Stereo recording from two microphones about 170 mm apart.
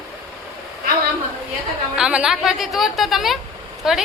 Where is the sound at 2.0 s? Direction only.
5° right (ahead or behind).